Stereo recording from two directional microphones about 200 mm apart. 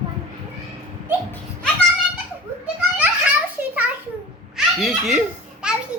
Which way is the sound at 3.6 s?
10° right (ahead or behind).